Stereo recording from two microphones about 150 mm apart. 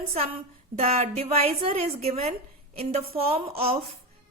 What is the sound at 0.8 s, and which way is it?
A woman's voice, 45° right (ahead or behind).